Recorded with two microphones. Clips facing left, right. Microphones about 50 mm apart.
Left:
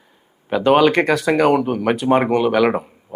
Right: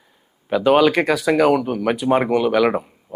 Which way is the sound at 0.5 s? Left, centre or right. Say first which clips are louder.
Left 1 dB; centre.